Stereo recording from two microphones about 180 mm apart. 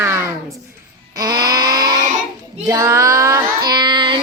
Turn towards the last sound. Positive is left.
turn(degrees=-25)  # may be behind; listen again after turning